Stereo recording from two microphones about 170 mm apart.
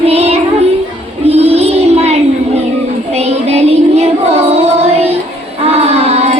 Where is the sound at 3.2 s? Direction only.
40° right (ahead or behind).